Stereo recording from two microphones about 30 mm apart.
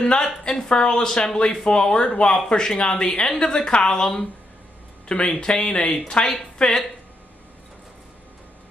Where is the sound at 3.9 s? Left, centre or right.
Left.